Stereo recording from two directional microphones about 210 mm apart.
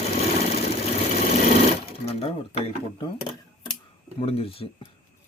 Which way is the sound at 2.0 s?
30° left (ahead or behind).